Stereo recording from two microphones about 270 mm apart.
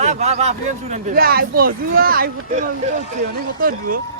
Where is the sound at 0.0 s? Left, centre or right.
Right.